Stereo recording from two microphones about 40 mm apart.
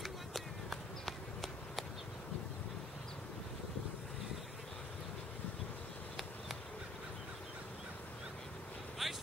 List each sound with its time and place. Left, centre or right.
0.0 s run: centre
9.0 s vehicle: centre